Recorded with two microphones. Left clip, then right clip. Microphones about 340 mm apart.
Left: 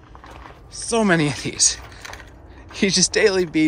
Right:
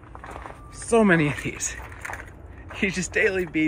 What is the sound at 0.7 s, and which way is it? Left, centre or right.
Speech, centre.